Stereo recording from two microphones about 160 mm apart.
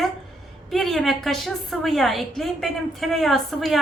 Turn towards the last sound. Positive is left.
turn(degrees=0)  # may be behind; listen again after turning